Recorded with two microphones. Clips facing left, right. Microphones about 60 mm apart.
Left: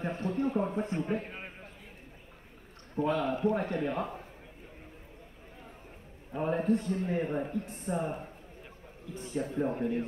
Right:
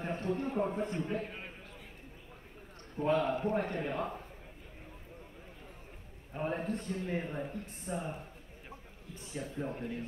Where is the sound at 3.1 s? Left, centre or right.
Right.